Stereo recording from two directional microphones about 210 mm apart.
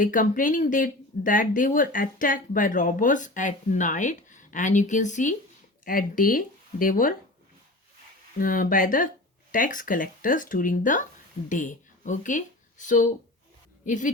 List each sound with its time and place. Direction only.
0.0 s speech: 40° left (ahead or behind)
8.4 s speech: 40° left (ahead or behind)